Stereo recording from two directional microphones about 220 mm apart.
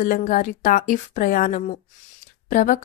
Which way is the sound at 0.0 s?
40° left (ahead or behind).